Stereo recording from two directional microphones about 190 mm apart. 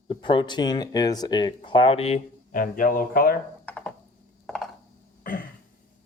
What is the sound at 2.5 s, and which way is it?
Speech, 45° left (ahead or behind).